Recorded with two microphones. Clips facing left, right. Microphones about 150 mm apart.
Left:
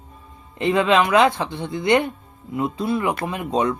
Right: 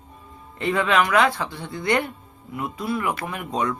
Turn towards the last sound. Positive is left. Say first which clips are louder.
# left 4 dB
turn(degrees=20)  # may be behind; listen again after turning